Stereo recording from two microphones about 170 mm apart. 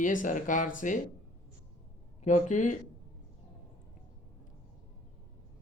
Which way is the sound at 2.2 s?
45° left (ahead or behind).